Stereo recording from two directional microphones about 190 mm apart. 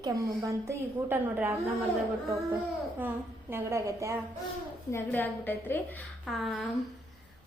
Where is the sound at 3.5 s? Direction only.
15° right (ahead or behind).